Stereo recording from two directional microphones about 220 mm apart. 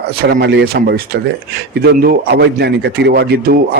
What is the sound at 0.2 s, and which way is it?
A man's voice, 45° right (ahead or behind).